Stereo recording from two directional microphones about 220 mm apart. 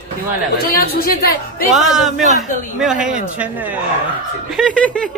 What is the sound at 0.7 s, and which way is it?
Speech, 45° left (ahead or behind).